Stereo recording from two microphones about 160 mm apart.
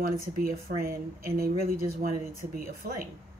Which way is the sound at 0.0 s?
65° right (ahead or behind).